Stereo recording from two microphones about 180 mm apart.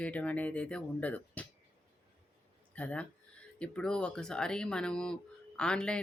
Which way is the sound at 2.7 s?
5° left (ahead or behind).